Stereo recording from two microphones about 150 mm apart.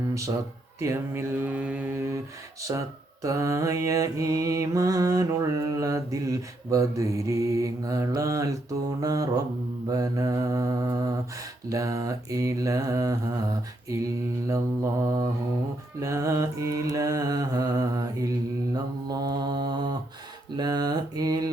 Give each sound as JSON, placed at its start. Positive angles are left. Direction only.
{"t": 0.8, "sound": "speech", "side_deg": -20}
{"t": 3.2, "sound": "mantra", "side_deg": -20}
{"t": 14.4, "sound": "mantra", "side_deg": -20}